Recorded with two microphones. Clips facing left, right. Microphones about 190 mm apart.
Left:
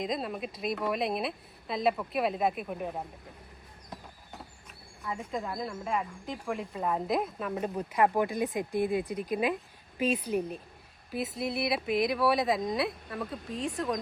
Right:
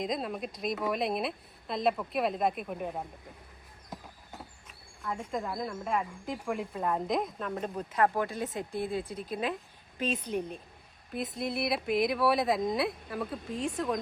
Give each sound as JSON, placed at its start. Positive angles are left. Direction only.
{"t": 0.0, "sound": "speech", "side_deg": 0}
{"t": 3.8, "sound": "a sound", "side_deg": 0}
{"t": 5.0, "sound": "speech", "side_deg": 0}